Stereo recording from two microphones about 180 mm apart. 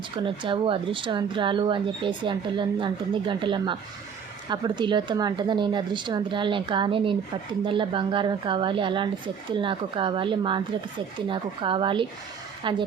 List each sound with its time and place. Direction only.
0.3 s speech: 30° right (ahead or behind)